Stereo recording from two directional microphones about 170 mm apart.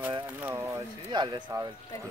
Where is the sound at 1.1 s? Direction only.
25° right (ahead or behind).